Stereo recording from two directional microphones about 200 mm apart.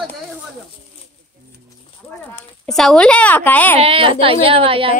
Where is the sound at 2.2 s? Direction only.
5° left (ahead or behind).